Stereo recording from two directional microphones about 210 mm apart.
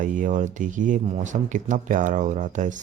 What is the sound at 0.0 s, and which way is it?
Speech, 40° right (ahead or behind).